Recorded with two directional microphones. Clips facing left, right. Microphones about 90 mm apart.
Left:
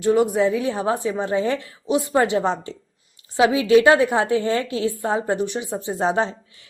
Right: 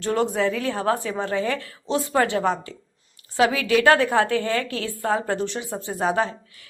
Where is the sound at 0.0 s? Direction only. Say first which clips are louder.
Left 4 dB; 10° left (ahead or behind).